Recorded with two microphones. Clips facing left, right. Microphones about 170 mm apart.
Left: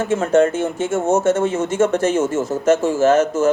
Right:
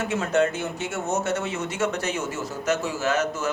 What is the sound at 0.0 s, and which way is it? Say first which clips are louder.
Speech: left 7 dB; 50° left (ahead or behind).